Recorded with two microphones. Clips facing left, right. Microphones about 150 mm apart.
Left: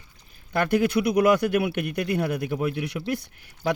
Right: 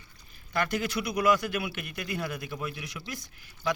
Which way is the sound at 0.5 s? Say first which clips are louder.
Left 8 dB; 55° left (ahead or behind).